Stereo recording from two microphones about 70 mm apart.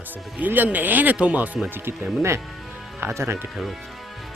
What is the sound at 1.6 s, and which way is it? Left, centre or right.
Speech, right.